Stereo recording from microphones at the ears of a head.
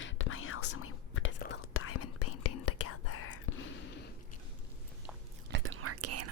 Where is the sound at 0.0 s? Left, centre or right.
Left.